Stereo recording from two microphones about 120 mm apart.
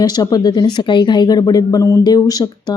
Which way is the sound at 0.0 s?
35° left (ahead or behind).